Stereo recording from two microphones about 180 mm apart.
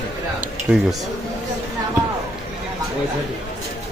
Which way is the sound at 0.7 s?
10° right (ahead or behind).